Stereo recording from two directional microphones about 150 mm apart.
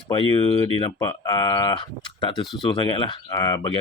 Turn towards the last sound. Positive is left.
turn(degrees=30)  # may be behind; listen again after turning